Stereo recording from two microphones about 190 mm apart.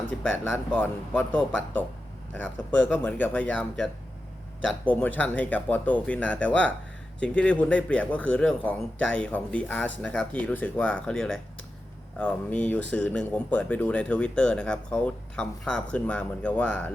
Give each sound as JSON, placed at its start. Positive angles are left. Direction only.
{"t": 0.1, "sound": "speech", "side_deg": 10}
{"t": 4.9, "sound": "speech", "side_deg": 10}